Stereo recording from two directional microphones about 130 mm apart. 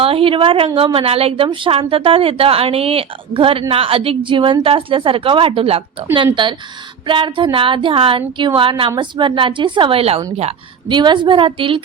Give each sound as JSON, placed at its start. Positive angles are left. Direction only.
{"t": 0.0, "sound": "a woman's voice", "side_deg": -45}
{"t": 6.4, "sound": "speech", "side_deg": -35}
{"t": 10.8, "sound": "speech", "side_deg": -35}